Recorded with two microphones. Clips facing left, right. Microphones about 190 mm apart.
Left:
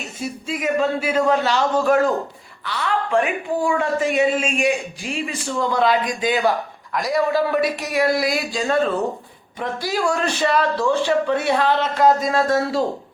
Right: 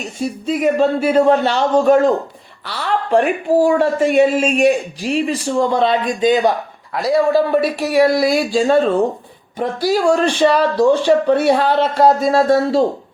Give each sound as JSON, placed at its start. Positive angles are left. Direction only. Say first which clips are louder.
{"t": 0.4, "sound": "speech", "louder": "right 6 dB", "side_deg": -35}
{"t": 2.6, "sound": "a sound", "louder": "right 3 dB", "side_deg": -35}
{"t": 3.6, "sound": "speech", "louder": "right 6 dB", "side_deg": -40}
{"t": 4.6, "sound": "speech", "louder": "right 7 dB", "side_deg": 0}
{"t": 5.7, "sound": "speech", "louder": "right 3 dB", "side_deg": -25}